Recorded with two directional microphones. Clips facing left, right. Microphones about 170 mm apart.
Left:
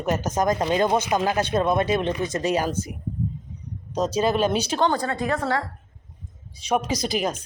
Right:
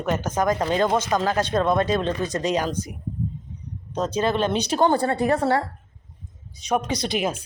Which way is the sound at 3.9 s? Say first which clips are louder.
Left 1 dB; 10° left (ahead or behind).